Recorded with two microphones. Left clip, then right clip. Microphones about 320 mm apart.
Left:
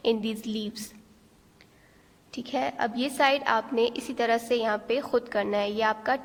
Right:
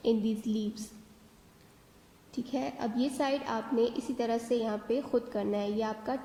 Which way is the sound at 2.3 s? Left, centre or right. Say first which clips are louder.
Left 6 dB; left.